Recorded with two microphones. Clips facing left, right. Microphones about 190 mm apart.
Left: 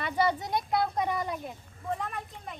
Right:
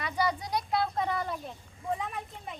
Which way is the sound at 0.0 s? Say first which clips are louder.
Left 3 dB; 25° left (ahead or behind).